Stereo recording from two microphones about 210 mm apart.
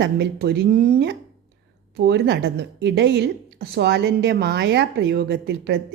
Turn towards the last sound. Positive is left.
turn(degrees=-55)  # may be behind; listen again after turning